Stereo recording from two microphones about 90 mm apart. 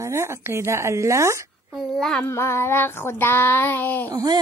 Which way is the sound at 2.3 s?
30° left (ahead or behind).